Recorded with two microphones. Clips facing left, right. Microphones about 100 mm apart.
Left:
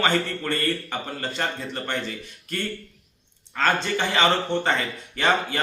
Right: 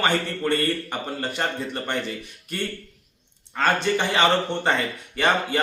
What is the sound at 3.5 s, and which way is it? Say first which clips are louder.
A man's voice: right 2 dB; 15° right (ahead or behind).